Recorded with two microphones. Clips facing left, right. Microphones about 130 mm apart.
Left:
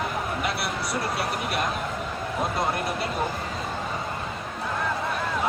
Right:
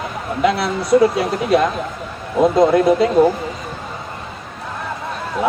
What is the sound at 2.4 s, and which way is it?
Speech, 90° right.